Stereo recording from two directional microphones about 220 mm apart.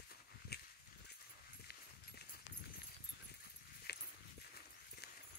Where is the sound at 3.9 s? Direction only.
45° left (ahead or behind).